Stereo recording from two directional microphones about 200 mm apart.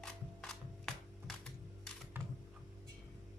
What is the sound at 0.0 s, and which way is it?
Music, 5° left (ahead or behind).